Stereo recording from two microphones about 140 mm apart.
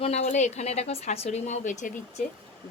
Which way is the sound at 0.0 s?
50° left (ahead or behind).